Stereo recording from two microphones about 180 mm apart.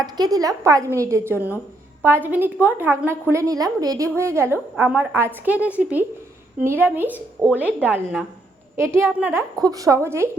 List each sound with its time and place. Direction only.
0.0 s a woman's voice: 20° right (ahead or behind)